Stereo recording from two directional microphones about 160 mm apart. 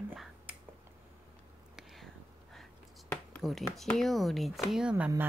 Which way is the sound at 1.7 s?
Centre (ahead or behind).